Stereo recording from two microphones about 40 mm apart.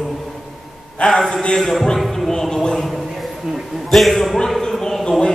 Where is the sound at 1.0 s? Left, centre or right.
Left.